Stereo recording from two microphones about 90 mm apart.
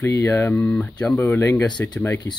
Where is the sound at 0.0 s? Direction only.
35° left (ahead or behind).